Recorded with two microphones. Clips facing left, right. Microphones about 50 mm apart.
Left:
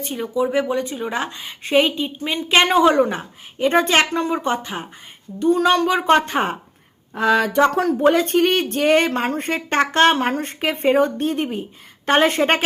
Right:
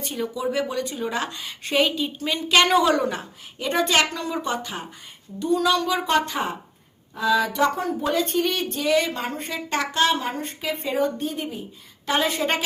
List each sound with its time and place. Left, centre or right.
0.1 s a woman's voice: centre; by 7.8 s left
7.8 s speech: left
8.0 s speech: left